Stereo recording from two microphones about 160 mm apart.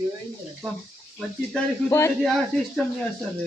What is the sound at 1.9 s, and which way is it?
Speech, 20° left (ahead or behind).